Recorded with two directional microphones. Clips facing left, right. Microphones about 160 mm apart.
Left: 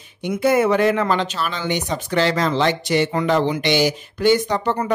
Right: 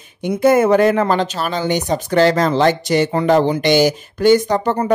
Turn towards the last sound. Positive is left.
turn(degrees=-45)  # may be behind; listen again after turning